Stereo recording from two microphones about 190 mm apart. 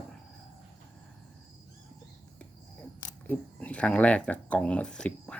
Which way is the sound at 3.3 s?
5° left (ahead or behind).